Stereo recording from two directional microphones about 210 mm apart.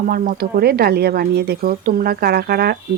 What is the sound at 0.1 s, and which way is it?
Speech, 40° right (ahead or behind).